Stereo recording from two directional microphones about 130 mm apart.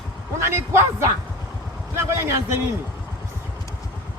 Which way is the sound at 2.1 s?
20° right (ahead or behind).